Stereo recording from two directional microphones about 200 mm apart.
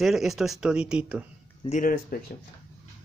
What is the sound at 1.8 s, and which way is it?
Speech, 45° left (ahead or behind).